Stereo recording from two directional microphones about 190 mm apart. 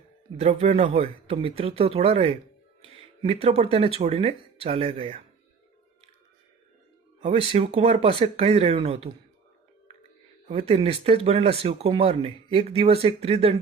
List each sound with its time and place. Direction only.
0.3 s speech: 35° right (ahead or behind)
7.2 s speech: 30° right (ahead or behind)
10.7 s speech: 30° right (ahead or behind)